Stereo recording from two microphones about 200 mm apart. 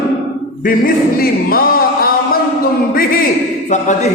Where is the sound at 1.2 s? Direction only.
45° left (ahead or behind).